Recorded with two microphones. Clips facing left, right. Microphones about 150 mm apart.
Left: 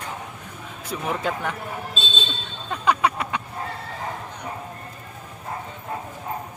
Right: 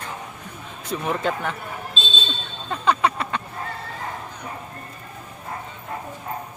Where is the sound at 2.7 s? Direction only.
10° left (ahead or behind).